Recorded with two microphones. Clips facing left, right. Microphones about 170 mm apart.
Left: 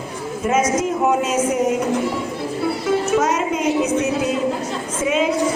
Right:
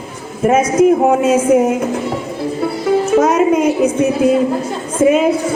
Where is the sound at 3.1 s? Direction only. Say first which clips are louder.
Right 7 dB; 55° right (ahead or behind).